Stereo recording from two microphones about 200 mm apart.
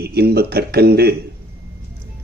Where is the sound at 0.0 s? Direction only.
50° right (ahead or behind).